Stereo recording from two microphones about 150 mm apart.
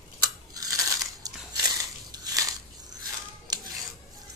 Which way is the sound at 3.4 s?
25° right (ahead or behind).